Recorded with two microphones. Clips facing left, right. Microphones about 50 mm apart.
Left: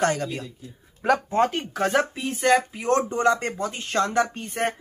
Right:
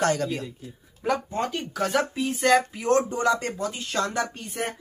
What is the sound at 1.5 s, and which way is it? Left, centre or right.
Speech, left.